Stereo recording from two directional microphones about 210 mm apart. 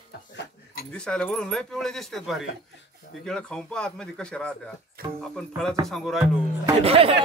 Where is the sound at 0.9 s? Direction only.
5° left (ahead or behind).